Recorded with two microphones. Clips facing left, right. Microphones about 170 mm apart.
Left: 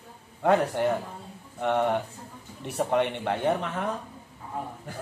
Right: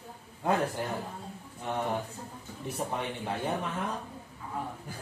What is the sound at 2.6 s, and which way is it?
Speech, 70° left (ahead or behind).